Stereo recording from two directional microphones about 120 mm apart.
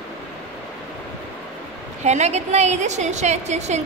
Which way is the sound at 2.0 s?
70° right (ahead or behind).